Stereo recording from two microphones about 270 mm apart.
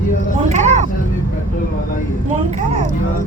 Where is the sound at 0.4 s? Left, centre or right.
Right.